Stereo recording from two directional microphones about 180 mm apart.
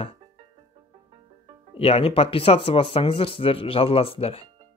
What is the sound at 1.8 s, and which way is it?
Speech, 35° left (ahead or behind).